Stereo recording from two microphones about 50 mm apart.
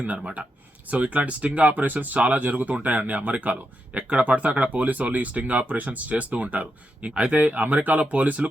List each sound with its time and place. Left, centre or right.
0.9 s speech: right